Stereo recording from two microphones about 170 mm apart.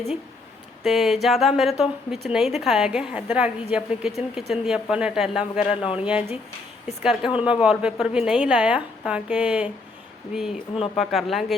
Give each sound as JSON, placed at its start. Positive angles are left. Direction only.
{"t": 0.9, "sound": "a woman's voice", "side_deg": 0}
{"t": 5.7, "sound": "speech", "side_deg": 30}
{"t": 6.0, "sound": "a woman's voice", "side_deg": -5}